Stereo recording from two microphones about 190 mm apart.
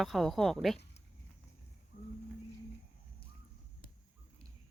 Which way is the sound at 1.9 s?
45° left (ahead or behind).